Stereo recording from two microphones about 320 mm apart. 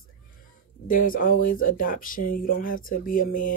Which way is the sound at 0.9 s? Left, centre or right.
Left.